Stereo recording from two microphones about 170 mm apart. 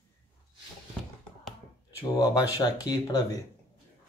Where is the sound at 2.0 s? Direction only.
20° left (ahead or behind).